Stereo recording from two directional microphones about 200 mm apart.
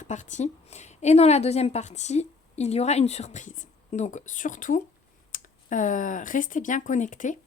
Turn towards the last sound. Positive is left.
turn(degrees=40)  # may be behind; listen again after turning